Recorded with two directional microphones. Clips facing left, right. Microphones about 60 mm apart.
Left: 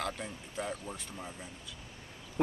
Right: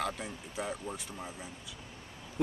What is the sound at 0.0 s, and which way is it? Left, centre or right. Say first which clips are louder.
Speech: right 2 dB; centre.